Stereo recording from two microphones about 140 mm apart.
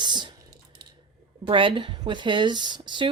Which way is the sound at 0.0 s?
30° right (ahead or behind).